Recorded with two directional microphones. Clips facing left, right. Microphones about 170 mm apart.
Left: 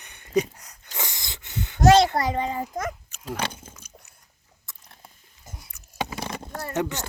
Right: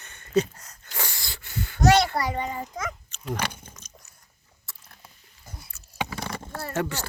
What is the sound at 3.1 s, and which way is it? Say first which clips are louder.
Dog: right 1 dB; 10° left (ahead or behind).